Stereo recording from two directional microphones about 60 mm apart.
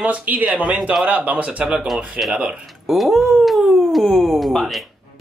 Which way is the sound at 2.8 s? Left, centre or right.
Centre.